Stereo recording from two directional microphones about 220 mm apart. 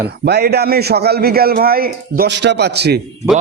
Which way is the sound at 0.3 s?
45° right (ahead or behind).